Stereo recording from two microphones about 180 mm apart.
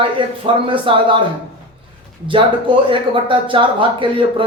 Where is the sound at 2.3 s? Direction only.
30° right (ahead or behind).